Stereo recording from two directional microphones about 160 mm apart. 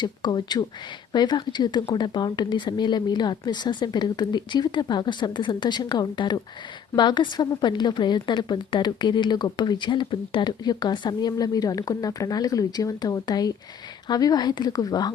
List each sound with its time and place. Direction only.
0.0 s a woman's voice: 25° left (ahead or behind)